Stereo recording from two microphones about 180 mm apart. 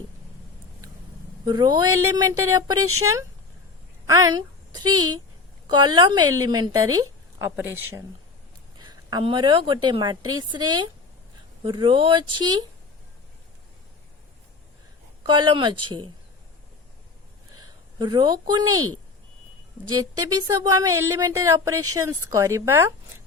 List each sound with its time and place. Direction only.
1.5 s a woman's voice: 25° right (ahead or behind)
15.2 s a woman's voice: 25° right (ahead or behind)
17.6 s a woman's voice: 25° right (ahead or behind)
19.9 s speech: 20° right (ahead or behind)